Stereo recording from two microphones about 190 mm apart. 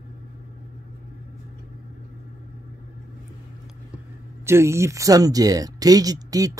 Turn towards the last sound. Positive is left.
turn(degrees=-20)  # may be behind; listen again after turning